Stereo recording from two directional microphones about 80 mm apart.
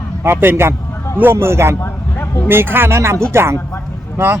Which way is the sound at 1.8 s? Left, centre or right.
Left.